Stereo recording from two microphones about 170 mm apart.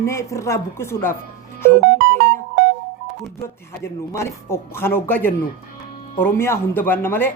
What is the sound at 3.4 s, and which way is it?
Speech, 15° left (ahead or behind).